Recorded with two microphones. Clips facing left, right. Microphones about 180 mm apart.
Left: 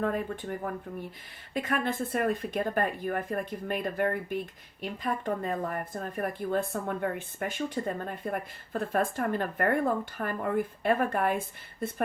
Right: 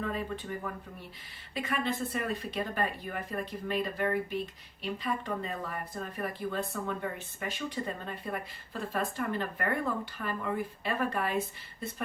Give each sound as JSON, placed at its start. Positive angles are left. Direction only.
{"t": 0.0, "sound": "speech", "side_deg": 50}